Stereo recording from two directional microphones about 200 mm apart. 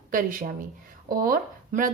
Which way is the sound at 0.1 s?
45° right (ahead or behind).